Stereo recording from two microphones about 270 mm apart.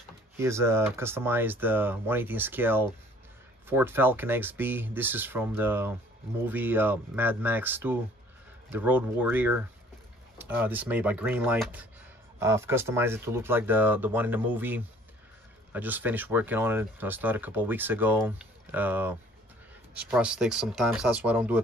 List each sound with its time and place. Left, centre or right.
0.4 s speech: centre